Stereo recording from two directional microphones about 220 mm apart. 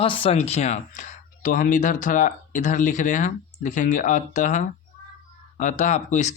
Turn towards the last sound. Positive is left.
turn(degrees=35)  # may be behind; listen again after turning